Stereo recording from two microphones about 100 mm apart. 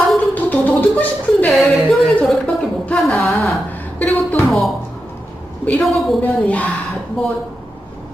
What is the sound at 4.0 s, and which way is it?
Speech, 15° left (ahead or behind).